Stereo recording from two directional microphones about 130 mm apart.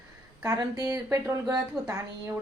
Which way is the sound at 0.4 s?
30° right (ahead or behind).